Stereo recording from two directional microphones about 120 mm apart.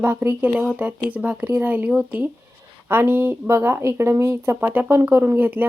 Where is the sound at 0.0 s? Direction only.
15° right (ahead or behind).